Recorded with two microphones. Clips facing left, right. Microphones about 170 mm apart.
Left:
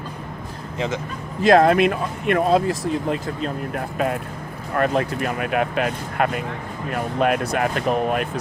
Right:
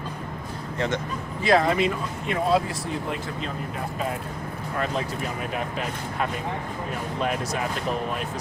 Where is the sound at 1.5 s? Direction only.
60° left (ahead or behind).